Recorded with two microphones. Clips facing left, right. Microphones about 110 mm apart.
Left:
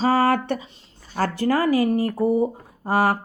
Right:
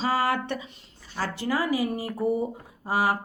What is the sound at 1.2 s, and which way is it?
Speech, 50° left (ahead or behind).